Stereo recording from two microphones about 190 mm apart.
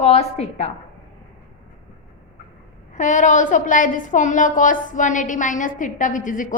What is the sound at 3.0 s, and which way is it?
A woman's voice, 40° left (ahead or behind).